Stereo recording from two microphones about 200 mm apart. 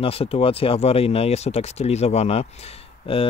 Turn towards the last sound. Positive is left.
turn(degrees=30)  # may be behind; listen again after turning